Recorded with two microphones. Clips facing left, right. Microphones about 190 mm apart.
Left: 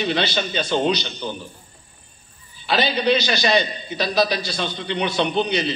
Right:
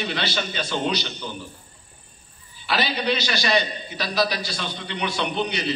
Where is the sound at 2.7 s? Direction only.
25° left (ahead or behind).